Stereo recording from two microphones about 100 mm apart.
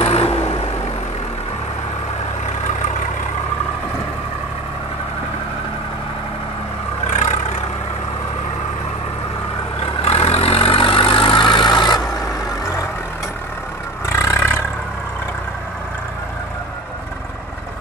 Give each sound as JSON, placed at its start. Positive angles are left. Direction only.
{"t": 0.0, "sound": "vehicle", "side_deg": 85}
{"t": 10.0, "sound": "vehicle", "side_deg": 85}
{"t": 14.0, "sound": "vehicle", "side_deg": 30}